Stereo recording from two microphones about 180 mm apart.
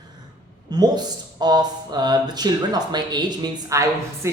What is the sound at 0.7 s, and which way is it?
A man's voice, 20° right (ahead or behind).